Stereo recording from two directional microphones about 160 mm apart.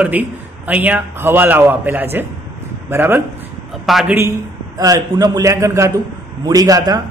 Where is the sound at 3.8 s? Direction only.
Centre (ahead or behind).